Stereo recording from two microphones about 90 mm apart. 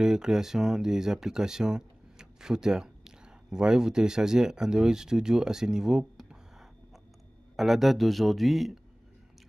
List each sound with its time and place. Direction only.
0.0 s speech: 5° right (ahead or behind)
7.5 s speech: centre (ahead or behind)